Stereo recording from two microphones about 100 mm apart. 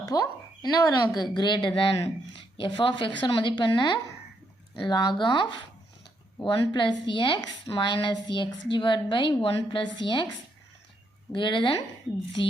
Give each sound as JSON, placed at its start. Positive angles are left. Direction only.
{"t": 0.0, "sound": "a woman's voice", "side_deg": 40}
{"t": 11.3, "sound": "a woman's voice", "side_deg": 55}